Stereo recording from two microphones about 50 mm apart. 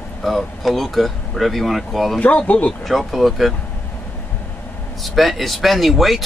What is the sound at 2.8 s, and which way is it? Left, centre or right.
Speech, centre.